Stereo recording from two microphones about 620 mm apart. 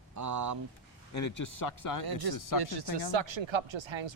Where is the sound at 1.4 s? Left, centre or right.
Left.